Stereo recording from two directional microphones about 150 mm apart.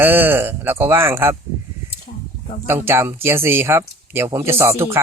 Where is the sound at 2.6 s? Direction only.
15° right (ahead or behind).